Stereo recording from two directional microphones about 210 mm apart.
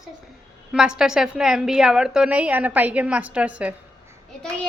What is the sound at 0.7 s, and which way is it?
A woman's voice, 5° right (ahead or behind).